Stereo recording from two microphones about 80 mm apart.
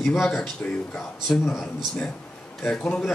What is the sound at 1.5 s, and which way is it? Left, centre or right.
A man's voice, centre.